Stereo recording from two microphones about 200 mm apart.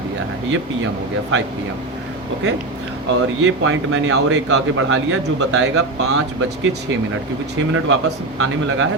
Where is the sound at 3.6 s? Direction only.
75° right (ahead or behind); by 6.2 s 90° right.